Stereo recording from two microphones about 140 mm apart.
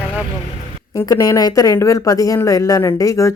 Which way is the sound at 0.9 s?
25° left (ahead or behind).